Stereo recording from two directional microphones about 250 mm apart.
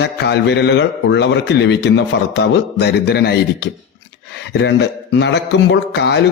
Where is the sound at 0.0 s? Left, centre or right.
Left.